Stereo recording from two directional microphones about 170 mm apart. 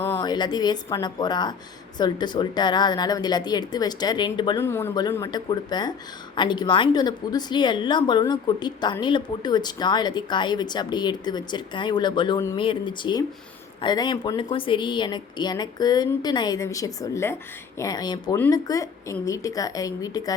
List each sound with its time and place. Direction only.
0.2 s speech: 25° left (ahead or behind)
4.6 s speech: 15° left (ahead or behind)